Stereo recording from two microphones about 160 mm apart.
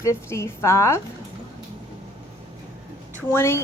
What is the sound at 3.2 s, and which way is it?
Speech, 15° left (ahead or behind).